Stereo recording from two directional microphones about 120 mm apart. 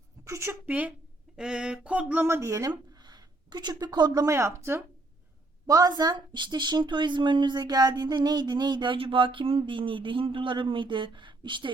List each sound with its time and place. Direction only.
0.3 s a woman's voice: 25° right (ahead or behind); by 11.7 s 45° right (ahead or behind)